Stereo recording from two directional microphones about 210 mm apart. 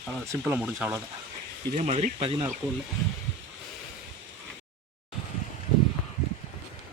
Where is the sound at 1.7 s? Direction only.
35° right (ahead or behind).